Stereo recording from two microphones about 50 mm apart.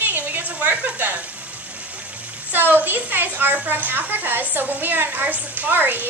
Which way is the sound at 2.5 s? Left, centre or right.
Right.